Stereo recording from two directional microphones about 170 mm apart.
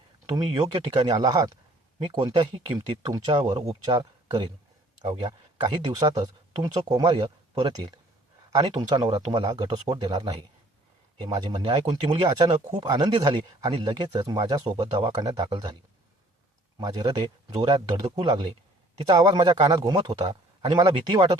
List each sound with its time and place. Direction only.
0.3 s speech: 25° right (ahead or behind)
8.5 s speech: 20° right (ahead or behind)
11.3 s speech: 35° right (ahead or behind)
16.7 s speech: 20° right (ahead or behind)